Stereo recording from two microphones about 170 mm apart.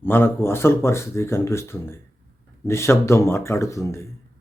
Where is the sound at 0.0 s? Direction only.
15° left (ahead or behind).